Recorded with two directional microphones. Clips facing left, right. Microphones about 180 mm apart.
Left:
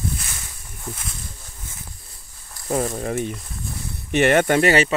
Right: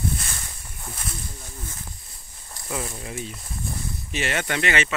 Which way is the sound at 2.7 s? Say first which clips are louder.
Left 9 dB; 45° left (ahead or behind).